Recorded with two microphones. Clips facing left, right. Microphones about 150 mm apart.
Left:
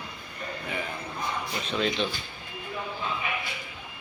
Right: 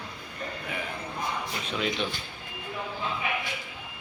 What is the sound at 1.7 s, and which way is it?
Speech, 10° right (ahead or behind).